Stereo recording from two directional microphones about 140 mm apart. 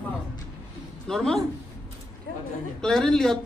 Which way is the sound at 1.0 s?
5° left (ahead or behind).